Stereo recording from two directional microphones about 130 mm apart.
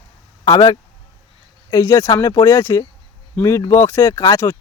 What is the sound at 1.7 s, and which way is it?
Speech, 25° left (ahead or behind).